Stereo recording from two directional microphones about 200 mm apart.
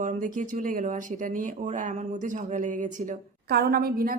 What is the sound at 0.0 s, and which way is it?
Speech, 40° right (ahead or behind).